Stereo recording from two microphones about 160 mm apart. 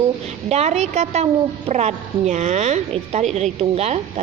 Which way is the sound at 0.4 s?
45° right (ahead or behind).